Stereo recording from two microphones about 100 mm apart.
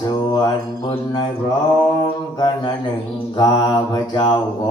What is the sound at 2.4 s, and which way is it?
Mantra, 45° left (ahead or behind).